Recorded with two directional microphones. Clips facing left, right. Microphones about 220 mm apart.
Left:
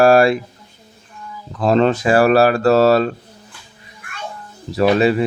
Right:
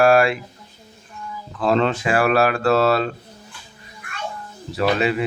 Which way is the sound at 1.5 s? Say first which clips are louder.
Left 4 dB; 40° left (ahead or behind).